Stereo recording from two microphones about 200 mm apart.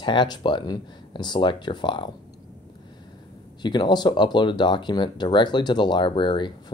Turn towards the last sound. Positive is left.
turn(degrees=25)  # may be behind; listen again after turning